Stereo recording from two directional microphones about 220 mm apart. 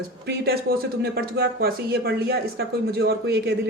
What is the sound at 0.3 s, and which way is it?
Speech, 45° right (ahead or behind).